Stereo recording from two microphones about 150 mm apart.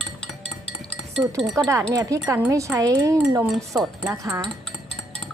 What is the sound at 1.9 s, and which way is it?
Speech, 20° right (ahead or behind).